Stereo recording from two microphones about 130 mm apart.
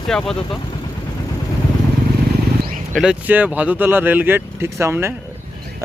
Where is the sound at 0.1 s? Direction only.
5° left (ahead or behind).